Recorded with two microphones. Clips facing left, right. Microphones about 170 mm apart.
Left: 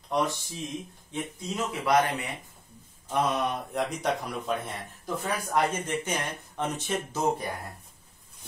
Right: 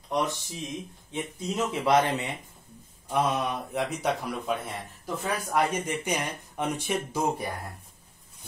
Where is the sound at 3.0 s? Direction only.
5° right (ahead or behind).